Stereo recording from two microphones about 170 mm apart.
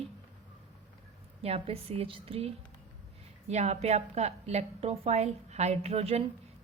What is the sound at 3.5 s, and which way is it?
A woman's voice, 40° right (ahead or behind).